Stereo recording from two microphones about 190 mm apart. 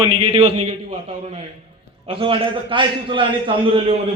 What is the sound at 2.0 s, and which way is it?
A man's voice, 30° right (ahead or behind).